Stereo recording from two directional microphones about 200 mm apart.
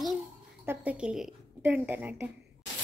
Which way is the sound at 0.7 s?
5° right (ahead or behind).